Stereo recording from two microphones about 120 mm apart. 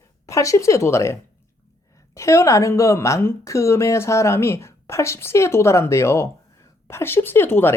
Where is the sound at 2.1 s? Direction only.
25° left (ahead or behind).